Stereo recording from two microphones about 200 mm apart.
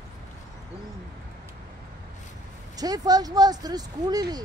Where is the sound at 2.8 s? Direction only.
20° right (ahead or behind).